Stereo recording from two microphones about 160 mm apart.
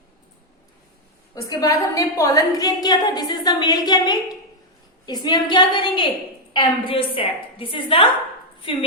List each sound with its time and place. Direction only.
1.4 s a woman's voice: 20° left (ahead or behind)